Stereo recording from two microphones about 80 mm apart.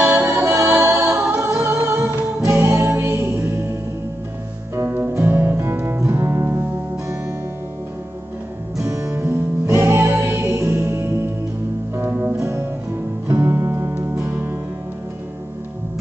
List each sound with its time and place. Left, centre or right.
0.0 s music: right
0.4 s music: right
4.7 s music: right
8.8 s music: right
12.4 s music: right